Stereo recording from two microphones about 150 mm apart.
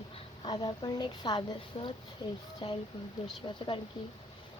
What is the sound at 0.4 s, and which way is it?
A woman's voice, 30° left (ahead or behind).